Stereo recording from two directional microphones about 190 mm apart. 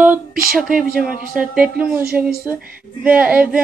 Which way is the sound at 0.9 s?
50° right (ahead or behind).